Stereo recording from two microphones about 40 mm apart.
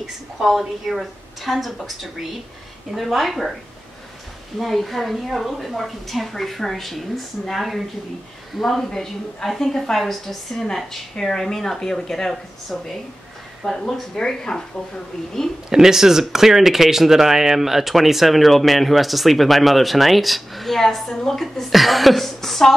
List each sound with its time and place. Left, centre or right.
0.0 s speech: centre
4.6 s a woman's voice: centre
15.7 s speech: centre